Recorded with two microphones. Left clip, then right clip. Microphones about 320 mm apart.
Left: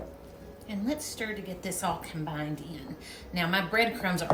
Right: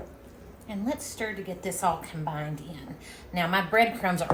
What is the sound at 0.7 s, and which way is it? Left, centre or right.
A woman's voice, centre.